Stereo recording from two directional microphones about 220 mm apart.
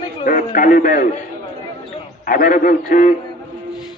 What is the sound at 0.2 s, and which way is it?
Speech, 35° left (ahead or behind).